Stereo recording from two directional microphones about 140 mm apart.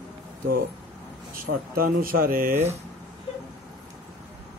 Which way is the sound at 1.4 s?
90° right.